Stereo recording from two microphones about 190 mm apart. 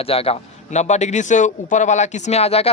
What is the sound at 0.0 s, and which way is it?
A man's voice, 30° left (ahead or behind).